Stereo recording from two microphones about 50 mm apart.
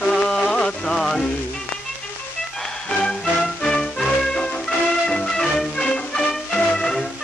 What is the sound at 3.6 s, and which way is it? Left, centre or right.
Music, centre.